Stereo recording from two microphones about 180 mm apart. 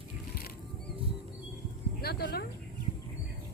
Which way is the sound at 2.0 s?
60° left (ahead or behind).